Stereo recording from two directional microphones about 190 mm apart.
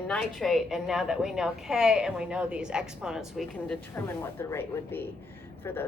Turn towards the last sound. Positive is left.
turn(degrees=10)  # may be behind; listen again after turning